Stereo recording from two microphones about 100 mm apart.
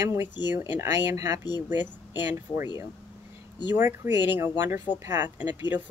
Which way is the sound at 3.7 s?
20° right (ahead or behind).